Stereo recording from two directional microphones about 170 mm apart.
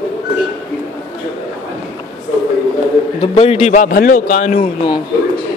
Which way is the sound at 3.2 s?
35° left (ahead or behind).